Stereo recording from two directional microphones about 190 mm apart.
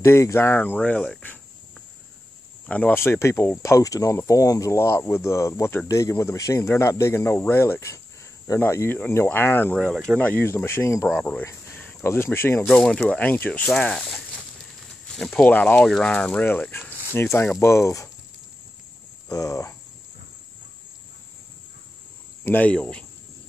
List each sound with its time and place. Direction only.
0.0 s speech: 15° left (ahead or behind)
2.6 s speech: 10° left (ahead or behind)
19.2 s speech: 20° left (ahead or behind)
22.4 s speech: 10° left (ahead or behind)